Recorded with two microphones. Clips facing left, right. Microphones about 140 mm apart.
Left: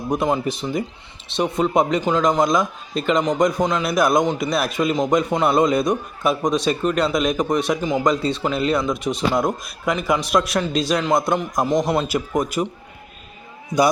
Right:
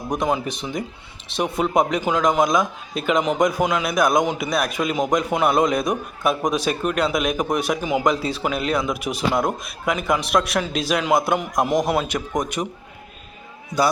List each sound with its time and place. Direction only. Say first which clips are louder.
0.1 s a man's voice: left 2 dB; centre (ahead or behind)